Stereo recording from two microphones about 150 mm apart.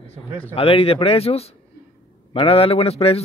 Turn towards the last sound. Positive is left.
turn(degrees=40)  # may be behind; listen again after turning